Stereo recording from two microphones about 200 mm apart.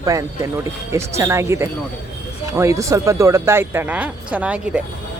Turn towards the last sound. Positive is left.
turn(degrees=-5)  # may be behind; listen again after turning